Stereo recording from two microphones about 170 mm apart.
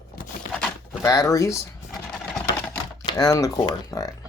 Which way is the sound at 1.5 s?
Centre (ahead or behind).